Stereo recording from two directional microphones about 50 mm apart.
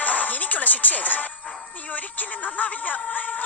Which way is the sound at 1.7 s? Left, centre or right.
Left.